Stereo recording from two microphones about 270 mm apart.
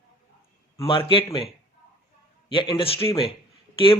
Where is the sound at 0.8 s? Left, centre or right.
Centre.